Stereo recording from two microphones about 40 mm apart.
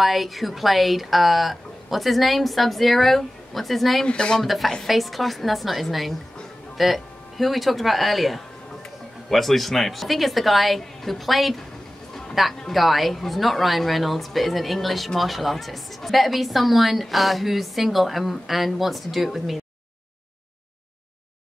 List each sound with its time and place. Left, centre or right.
0.0 s a woman's voice: centre
4.1 s speech: left
4.4 s a woman's voice: centre